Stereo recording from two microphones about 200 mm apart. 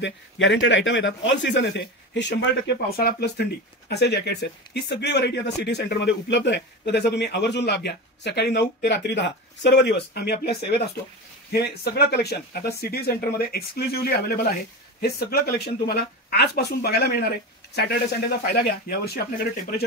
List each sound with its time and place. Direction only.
0.0 s speech: 65° left (ahead or behind)